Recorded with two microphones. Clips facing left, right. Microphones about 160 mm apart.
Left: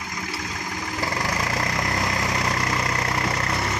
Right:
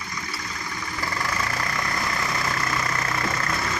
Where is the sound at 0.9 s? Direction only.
40° left (ahead or behind).